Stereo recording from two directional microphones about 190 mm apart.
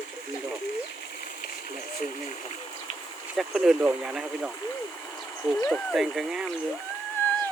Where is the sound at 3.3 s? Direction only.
5° right (ahead or behind).